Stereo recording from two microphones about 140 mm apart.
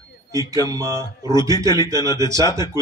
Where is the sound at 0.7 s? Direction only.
20° right (ahead or behind).